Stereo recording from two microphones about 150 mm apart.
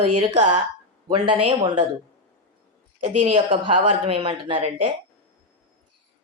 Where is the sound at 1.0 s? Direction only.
35° right (ahead or behind).